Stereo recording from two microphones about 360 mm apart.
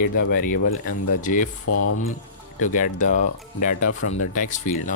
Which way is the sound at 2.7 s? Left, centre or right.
Left.